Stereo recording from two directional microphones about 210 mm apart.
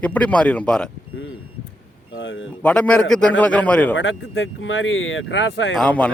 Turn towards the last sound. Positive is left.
turn(degrees=5)  # may be behind; listen again after turning